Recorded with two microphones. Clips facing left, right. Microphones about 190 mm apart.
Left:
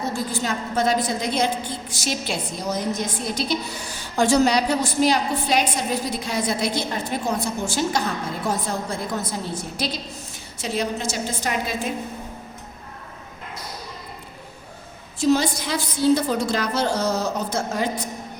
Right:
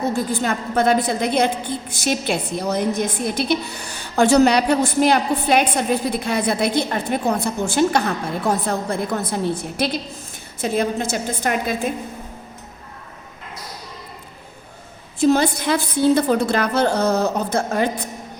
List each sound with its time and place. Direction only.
0.0 s a woman's voice: 60° right (ahead or behind)
15.2 s a woman's voice: 55° right (ahead or behind)